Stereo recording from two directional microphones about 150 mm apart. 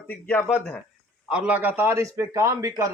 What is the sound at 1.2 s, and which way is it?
A man's voice, 5° right (ahead or behind).